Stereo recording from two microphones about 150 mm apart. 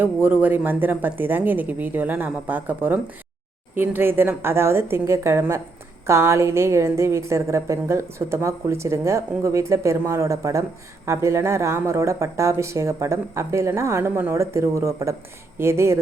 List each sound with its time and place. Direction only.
0.0 s a woman's voice: 10° right (ahead or behind)